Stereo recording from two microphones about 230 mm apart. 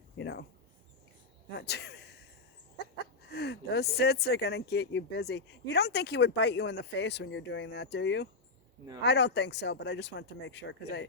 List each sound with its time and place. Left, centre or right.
0.2 s mouse: left
1.5 s speech: left
3.2 s speech: left